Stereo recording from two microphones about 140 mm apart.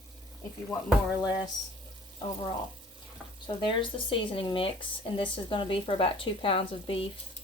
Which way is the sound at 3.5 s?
35° left (ahead or behind).